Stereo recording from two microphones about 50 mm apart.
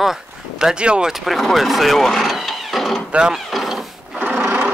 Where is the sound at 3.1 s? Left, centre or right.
Centre.